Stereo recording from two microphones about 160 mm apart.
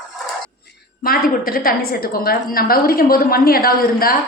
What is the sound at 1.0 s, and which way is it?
A woman's voice, 65° left (ahead or behind).